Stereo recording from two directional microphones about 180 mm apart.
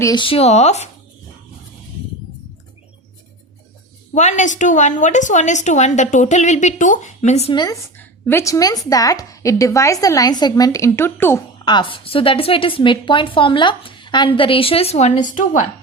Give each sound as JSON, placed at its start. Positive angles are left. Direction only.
{"t": 0.0, "sound": "a woman's voice", "side_deg": 25}
{"t": 4.1, "sound": "a woman's voice", "side_deg": 40}
{"t": 7.5, "sound": "a woman's voice", "side_deg": 25}
{"t": 7.9, "sound": "a woman's voice", "side_deg": 10}
{"t": 11.6, "sound": "a woman's voice", "side_deg": 25}